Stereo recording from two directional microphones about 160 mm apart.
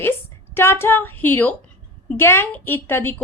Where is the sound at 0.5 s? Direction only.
15° left (ahead or behind).